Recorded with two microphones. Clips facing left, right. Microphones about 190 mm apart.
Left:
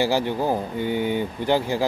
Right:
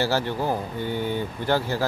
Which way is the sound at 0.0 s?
15° left (ahead or behind).